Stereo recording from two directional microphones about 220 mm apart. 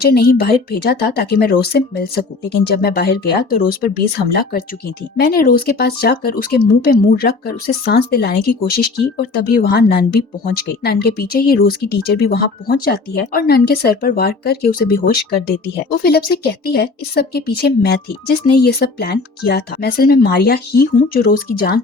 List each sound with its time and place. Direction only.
0.0 s speech: 45° left (ahead or behind)